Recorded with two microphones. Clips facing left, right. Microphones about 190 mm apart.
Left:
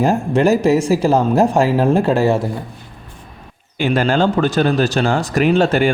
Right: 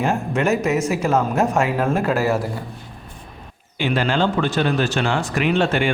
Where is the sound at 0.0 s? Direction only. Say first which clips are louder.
Left 6 dB; 35° left (ahead or behind).